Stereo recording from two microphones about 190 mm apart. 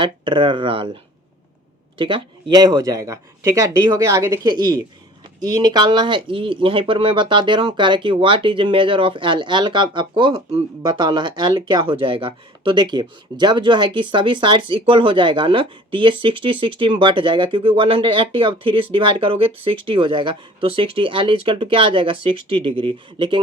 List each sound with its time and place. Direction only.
0.0 s speech: 25° right (ahead or behind)
2.0 s speech: 25° right (ahead or behind)